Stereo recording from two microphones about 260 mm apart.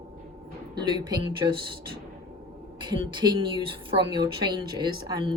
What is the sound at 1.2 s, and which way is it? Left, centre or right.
Speech, centre.